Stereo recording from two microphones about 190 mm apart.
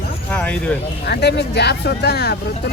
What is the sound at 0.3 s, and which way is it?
Vehicle, 10° left (ahead or behind).